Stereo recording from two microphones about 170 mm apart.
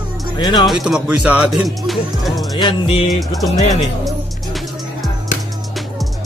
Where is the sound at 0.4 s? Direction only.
25° left (ahead or behind).